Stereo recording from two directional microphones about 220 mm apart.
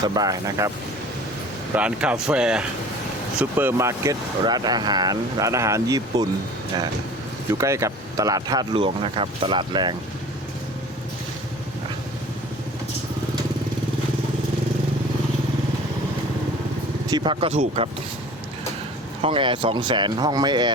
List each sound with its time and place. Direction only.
0.1 s speech: 15° right (ahead or behind)
1.7 s speech: 5° right (ahead or behind)
7.6 s speech: 15° right (ahead or behind)
17.1 s speech: 20° right (ahead or behind)
19.2 s speech: 20° right (ahead or behind)